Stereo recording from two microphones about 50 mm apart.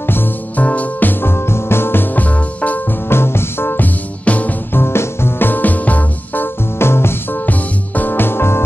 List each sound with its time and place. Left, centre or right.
0.6 s music: left
1.2 s organ: left
2.1 s music: left
3.1 s music: left
4.2 s music: left
4.7 s music: left
5.5 s music: left
6.8 s music: left
7.4 s music: left